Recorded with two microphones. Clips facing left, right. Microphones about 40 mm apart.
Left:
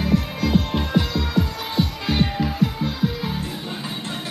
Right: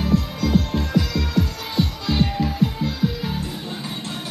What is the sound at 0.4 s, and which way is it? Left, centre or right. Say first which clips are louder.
Music: even; left.